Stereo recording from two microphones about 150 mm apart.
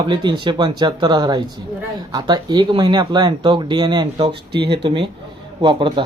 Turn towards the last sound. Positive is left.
turn(degrees=-30)  # may be behind; listen again after turning